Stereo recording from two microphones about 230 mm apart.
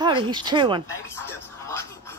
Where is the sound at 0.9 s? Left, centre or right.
Centre.